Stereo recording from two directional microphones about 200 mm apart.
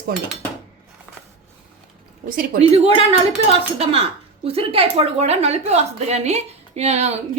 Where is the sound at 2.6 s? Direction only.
30° right (ahead or behind).